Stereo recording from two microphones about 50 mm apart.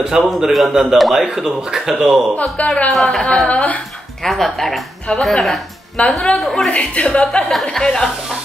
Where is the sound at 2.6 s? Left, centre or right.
Left.